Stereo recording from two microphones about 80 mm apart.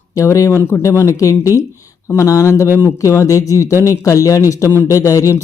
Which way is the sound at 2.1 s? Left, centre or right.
Left.